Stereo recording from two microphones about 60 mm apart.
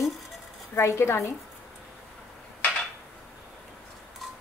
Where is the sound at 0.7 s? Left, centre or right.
Left.